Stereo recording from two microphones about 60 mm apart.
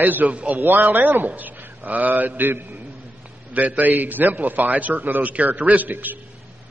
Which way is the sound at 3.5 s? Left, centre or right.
Right.